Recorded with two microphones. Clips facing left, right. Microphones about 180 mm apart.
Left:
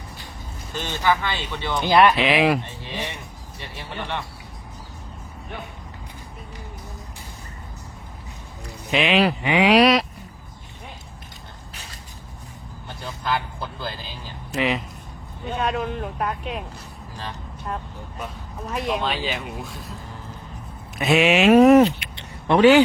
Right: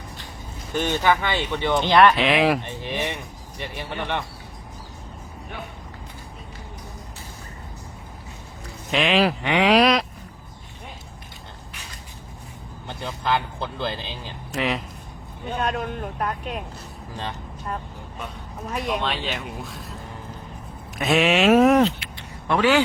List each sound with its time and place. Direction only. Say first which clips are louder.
1.0 s speech: left 2 dB; 20° right (ahead or behind)
1.8 s speech: left 1 dB; 10° left (ahead or behind)
2.6 s speech: right 3 dB; 15° right (ahead or behind)
8.9 s speech: left 1 dB; centre (ahead or behind)
13.2 s speech: right 2 dB; 25° right (ahead or behind)
14.5 s speech: left 2 dB; centre (ahead or behind)
18.7 s speech: left 1 dB; centre (ahead or behind)
21.0 s speech: left 2 dB; centre (ahead or behind)
21.8 s a sound: even; 15° left (ahead or behind)